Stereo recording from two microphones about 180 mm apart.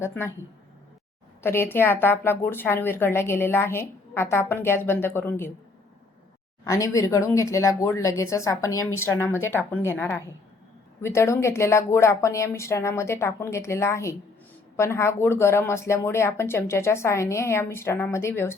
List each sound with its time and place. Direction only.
0.0 s a woman's voice: 10° left (ahead or behind)
1.4 s a woman's voice: 15° left (ahead or behind)
6.7 s a woman's voice: 20° left (ahead or behind)